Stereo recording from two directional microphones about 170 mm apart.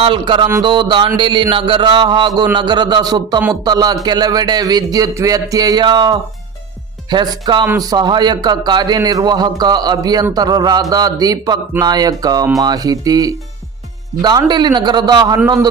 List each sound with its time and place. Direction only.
0.0 s a man's voice: 30° right (ahead or behind)